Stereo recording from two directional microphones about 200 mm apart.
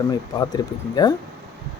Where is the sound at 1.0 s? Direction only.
20° left (ahead or behind).